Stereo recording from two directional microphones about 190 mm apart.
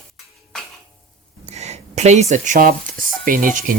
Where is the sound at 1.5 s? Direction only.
35° right (ahead or behind).